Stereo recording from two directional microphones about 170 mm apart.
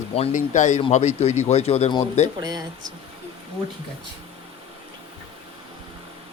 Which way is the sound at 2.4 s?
25° right (ahead or behind).